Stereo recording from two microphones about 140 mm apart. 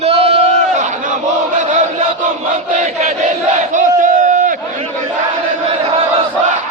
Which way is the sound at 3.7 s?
65° right (ahead or behind).